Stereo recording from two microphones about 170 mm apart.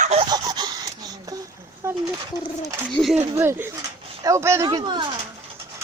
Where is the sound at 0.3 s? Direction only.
25° right (ahead or behind).